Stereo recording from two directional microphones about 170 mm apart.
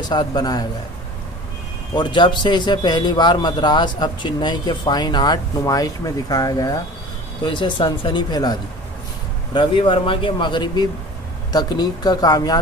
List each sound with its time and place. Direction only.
0.0 s a man's voice: 25° left (ahead or behind)
2.0 s a man's voice: 25° left (ahead or behind)